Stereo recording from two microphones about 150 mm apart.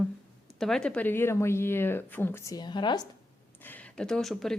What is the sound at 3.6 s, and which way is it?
Speech, 10° left (ahead or behind).